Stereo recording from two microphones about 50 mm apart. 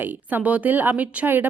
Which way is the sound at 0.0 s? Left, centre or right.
Right.